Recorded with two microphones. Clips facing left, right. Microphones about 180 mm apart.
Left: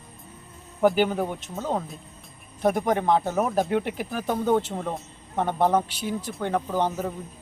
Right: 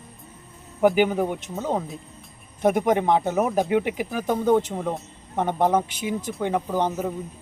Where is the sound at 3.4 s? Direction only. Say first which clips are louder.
Right 2 dB; 5° right (ahead or behind).